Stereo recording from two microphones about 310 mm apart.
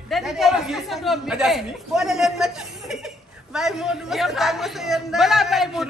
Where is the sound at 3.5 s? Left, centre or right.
Centre.